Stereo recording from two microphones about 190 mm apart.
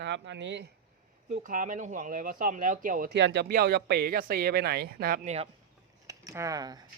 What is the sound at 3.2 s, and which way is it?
Speech, 70° right (ahead or behind).